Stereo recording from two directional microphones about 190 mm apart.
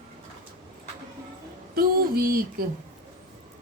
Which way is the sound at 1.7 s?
50° right (ahead or behind).